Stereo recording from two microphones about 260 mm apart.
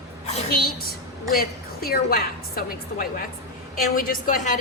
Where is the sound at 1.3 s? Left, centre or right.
Left.